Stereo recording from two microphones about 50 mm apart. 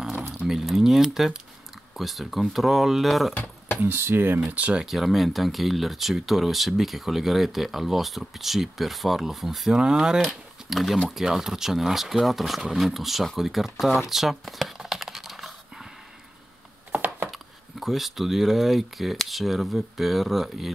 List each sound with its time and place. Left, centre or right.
0.5 s speech: centre
3.8 s speech: right
4.5 s speech: right
4.8 s speech: centre
10.2 s speech: centre
14.9 s computer keyboard: centre
17.3 s speech: centre